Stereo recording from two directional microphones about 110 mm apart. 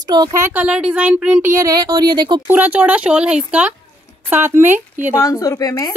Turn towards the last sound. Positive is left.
turn(degrees=35)  # may be behind; listen again after turning